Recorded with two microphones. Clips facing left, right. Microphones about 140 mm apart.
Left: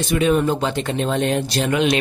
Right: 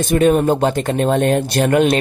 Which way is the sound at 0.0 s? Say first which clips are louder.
Right 4 dB; 50° right (ahead or behind).